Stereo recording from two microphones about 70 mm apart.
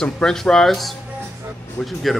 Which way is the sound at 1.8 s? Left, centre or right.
Centre.